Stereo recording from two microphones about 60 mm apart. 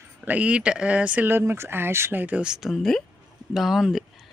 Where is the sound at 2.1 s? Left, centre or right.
Right.